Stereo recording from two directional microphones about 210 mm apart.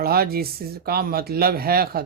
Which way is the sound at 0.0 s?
45° right (ahead or behind).